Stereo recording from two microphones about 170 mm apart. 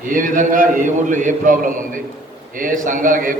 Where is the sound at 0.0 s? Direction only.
50° right (ahead or behind).